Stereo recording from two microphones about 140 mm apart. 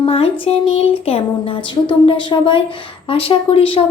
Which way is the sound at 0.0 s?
45° left (ahead or behind).